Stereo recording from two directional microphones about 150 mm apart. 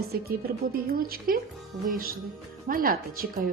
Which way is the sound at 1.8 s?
70° right (ahead or behind).